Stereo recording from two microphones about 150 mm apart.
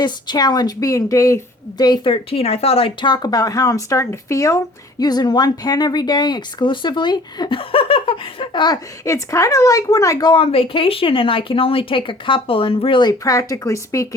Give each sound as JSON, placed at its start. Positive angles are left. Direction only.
{"t": 0.0, "sound": "speech", "side_deg": 30}